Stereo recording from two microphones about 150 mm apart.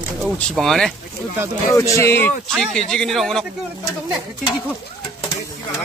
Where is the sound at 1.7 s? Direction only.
20° left (ahead or behind).